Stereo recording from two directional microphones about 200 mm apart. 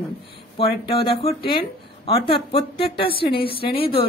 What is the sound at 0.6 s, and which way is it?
A woman's voice, 25° left (ahead or behind).